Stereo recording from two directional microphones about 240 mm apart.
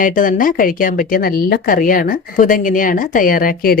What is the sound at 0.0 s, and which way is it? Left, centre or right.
Speech, left.